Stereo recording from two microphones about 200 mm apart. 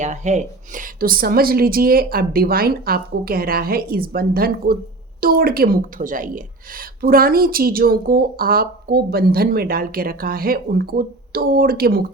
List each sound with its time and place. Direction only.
0.0 s a woman's voice: 35° right (ahead or behind)